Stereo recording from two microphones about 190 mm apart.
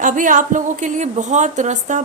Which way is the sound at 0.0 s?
45° right (ahead or behind).